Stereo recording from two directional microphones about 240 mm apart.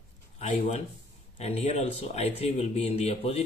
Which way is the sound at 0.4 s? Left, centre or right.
Left.